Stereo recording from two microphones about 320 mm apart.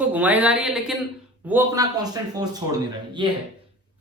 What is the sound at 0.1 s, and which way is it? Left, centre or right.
A man's voice, centre.